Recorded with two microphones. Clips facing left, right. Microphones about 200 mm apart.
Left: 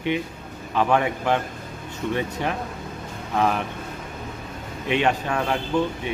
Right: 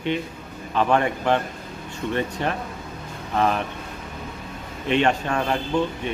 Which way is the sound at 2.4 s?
10° left (ahead or behind).